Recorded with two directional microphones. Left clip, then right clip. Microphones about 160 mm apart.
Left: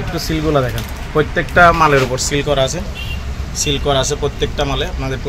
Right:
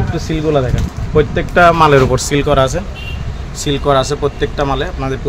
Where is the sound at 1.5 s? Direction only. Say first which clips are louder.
Right 2 dB; 55° right (ahead or behind); by 2.8 s 80° right.